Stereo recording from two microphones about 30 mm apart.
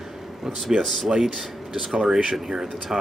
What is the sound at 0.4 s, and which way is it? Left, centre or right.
Speech, centre.